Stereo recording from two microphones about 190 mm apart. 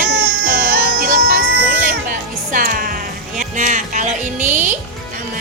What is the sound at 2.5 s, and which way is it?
Speech, 50° right (ahead or behind).